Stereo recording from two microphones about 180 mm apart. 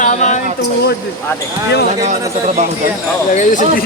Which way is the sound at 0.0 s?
45° left (ahead or behind).